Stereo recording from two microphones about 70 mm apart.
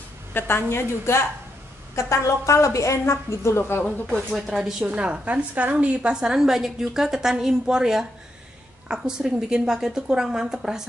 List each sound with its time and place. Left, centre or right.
0.3 s a woman's voice: left
4.3 s speech: centre
4.9 s a woman's voice: centre
6.1 s a woman's voice: centre